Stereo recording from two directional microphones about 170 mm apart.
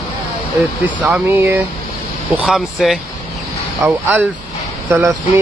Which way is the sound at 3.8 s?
15° right (ahead or behind).